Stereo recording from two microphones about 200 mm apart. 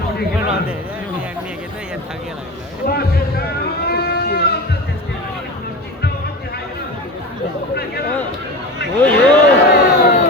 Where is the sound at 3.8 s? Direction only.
50° left (ahead or behind).